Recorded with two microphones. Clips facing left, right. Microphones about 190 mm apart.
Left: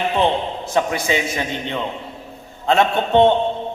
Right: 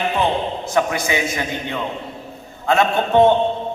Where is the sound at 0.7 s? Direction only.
25° left (ahead or behind).